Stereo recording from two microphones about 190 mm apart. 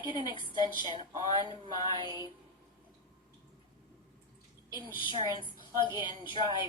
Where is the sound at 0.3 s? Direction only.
25° left (ahead or behind).